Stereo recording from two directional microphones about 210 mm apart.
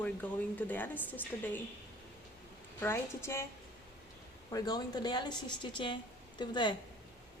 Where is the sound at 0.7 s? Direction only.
10° left (ahead or behind).